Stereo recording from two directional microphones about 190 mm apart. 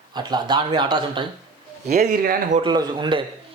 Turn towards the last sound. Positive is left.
turn(degrees=-25)  # may be behind; listen again after turning